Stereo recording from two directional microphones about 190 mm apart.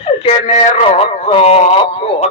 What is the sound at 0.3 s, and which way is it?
A man's voice, 35° left (ahead or behind).